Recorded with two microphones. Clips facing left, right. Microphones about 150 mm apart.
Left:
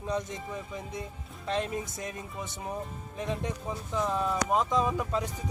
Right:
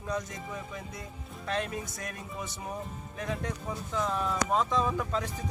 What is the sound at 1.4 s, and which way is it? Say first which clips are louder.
Speech: left 2 dB; 20° left (ahead or behind).